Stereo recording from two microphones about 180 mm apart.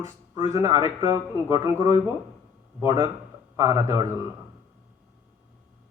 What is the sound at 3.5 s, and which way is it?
Speech, 15° right (ahead or behind).